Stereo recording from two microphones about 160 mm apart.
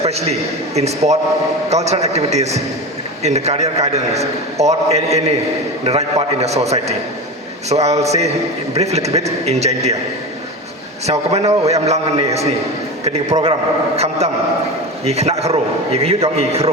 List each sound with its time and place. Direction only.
0.0 s a man's voice: 40° right (ahead or behind)
11.0 s a man's voice: 40° right (ahead or behind)